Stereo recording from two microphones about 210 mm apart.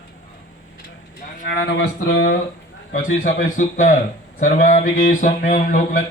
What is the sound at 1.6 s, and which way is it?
Speech, 50° left (ahead or behind).